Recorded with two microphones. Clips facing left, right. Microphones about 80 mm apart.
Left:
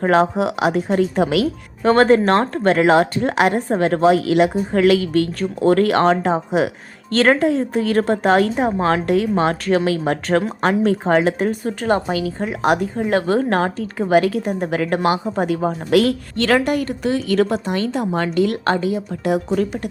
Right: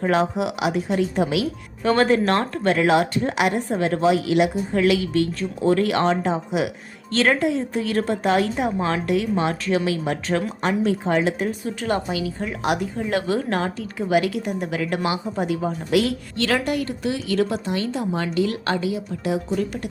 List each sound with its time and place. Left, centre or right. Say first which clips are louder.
0.0 s speech: left 5 dB; left
1.8 s a woman's voice: left 5 dB; left
11.9 s a woman's voice: left 5 dB; left
18.6 s speech: left 5 dB; left